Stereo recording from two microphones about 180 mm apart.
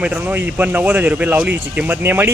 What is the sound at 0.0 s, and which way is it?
Speech, 5° right (ahead or behind).